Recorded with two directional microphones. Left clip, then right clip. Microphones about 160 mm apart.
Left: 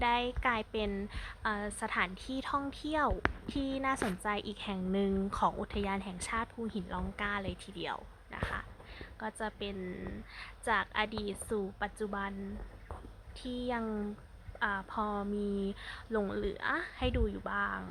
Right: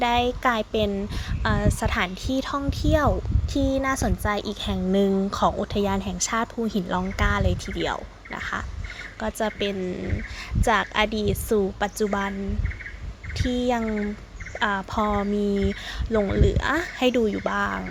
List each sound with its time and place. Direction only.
0.0 s a woman's voice: 15° right (ahead or behind)
4.6 s a woman's voice: 20° right (ahead or behind)
5.8 s a woman's voice: 25° right (ahead or behind)
13.4 s a woman's voice: 25° right (ahead or behind)